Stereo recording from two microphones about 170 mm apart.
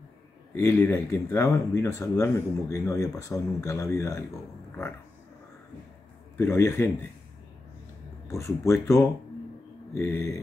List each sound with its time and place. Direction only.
0.6 s speech: 15° left (ahead or behind)
6.3 s speech: 15° left (ahead or behind)
8.3 s speech: 15° left (ahead or behind)